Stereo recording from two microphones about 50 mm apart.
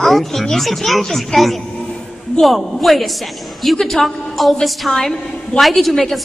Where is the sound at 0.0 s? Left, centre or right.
Centre.